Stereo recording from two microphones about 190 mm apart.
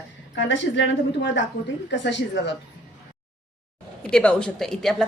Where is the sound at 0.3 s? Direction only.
75° left (ahead or behind).